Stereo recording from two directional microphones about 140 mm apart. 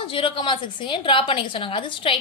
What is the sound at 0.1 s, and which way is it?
A woman's voice, 40° left (ahead or behind).